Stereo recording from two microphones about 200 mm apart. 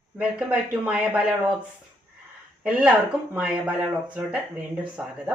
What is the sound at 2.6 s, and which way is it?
Speech, 5° right (ahead or behind).